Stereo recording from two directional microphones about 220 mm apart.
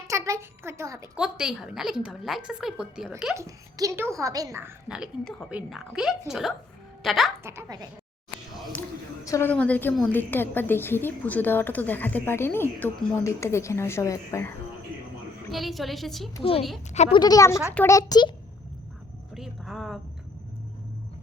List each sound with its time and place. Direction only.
0.1 s a woman's voice: 15° right (ahead or behind)
3.3 s a woman's voice: 15° right (ahead or behind)
7.4 s a woman's voice: 15° right (ahead or behind)
9.2 s a woman's voice: 10° left (ahead or behind)
15.5 s a woman's voice: centre (ahead or behind)
16.4 s a woman's voice: 25° left (ahead or behind)
17.2 s a woman's voice: 15° left (ahead or behind)
19.3 s a sound: centre (ahead or behind)